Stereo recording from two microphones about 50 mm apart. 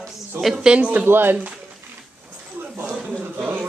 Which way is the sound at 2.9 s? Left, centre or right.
Centre.